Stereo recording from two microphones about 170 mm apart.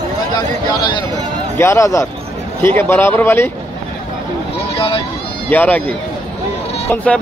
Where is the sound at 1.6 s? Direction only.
15° left (ahead or behind).